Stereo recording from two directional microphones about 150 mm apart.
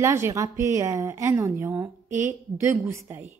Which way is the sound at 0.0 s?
20° right (ahead or behind).